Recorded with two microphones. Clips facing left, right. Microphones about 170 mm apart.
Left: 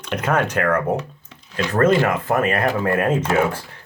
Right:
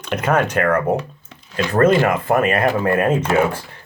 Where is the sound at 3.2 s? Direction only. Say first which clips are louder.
Right 2 dB; 65° right (ahead or behind).